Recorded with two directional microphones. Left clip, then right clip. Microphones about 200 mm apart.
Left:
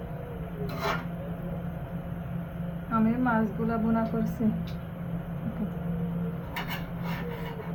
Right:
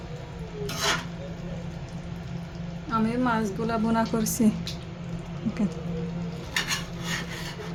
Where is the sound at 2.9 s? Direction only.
70° right (ahead or behind).